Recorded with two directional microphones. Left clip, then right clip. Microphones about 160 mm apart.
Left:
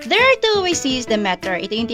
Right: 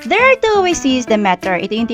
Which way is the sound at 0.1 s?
45° right (ahead or behind).